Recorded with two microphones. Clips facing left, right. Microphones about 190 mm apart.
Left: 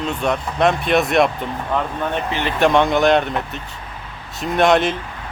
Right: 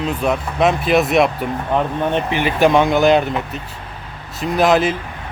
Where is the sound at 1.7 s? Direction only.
15° right (ahead or behind).